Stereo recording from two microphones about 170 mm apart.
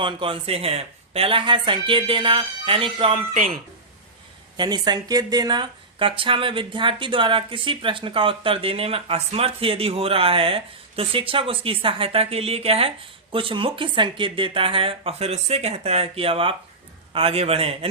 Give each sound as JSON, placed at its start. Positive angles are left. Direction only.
{"t": 0.0, "sound": "speech", "side_deg": -30}
{"t": 3.3, "sound": "speech", "side_deg": -55}
{"t": 4.5, "sound": "speech", "side_deg": -25}